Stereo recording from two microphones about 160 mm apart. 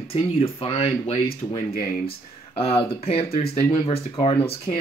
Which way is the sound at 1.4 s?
25° left (ahead or behind).